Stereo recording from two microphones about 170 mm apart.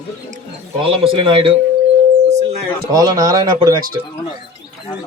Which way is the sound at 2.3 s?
40° right (ahead or behind).